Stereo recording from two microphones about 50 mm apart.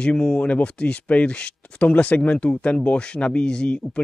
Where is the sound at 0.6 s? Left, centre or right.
Left.